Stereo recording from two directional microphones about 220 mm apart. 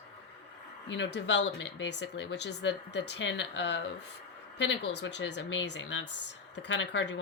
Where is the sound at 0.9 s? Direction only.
55° left (ahead or behind).